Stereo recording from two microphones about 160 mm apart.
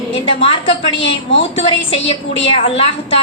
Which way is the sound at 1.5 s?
35° left (ahead or behind).